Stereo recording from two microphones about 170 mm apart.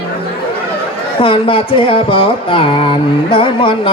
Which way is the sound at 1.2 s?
30° left (ahead or behind).